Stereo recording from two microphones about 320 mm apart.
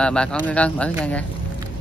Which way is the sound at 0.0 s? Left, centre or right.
Centre.